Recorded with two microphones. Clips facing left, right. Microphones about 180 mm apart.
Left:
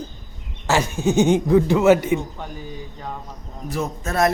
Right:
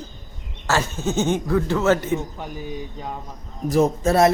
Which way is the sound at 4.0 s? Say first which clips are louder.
Right 1 dB; 25° right (ahead or behind).